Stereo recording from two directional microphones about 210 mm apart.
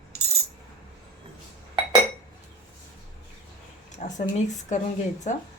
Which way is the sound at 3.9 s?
35° left (ahead or behind).